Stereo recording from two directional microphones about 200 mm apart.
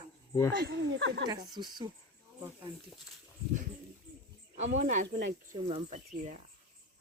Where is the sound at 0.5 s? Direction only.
55° right (ahead or behind).